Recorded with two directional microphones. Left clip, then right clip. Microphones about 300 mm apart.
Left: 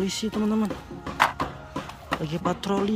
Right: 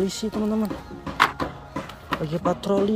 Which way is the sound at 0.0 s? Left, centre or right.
Centre.